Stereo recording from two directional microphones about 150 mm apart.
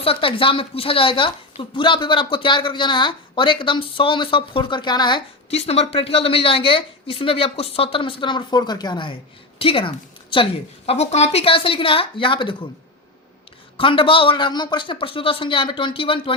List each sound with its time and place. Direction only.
0.0 s a woman's voice: 35° left (ahead or behind)
5.5 s a woman's voice: 45° left (ahead or behind)
13.7 s a woman's voice: 35° left (ahead or behind)